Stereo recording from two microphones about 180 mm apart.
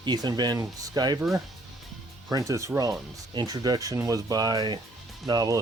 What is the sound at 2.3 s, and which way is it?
Speech, 20° right (ahead or behind).